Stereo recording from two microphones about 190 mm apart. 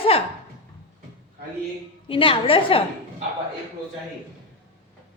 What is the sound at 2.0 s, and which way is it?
Speech, 30° left (ahead or behind).